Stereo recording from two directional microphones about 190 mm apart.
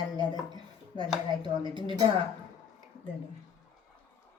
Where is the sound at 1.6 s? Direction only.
25° right (ahead or behind).